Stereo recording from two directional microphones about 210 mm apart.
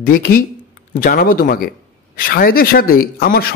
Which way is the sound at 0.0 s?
45° left (ahead or behind).